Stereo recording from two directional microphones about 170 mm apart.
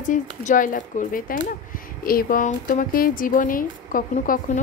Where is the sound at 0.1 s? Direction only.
50° left (ahead or behind).